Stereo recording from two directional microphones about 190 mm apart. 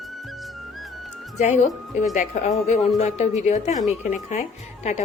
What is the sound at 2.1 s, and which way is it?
A woman's voice, 40° left (ahead or behind).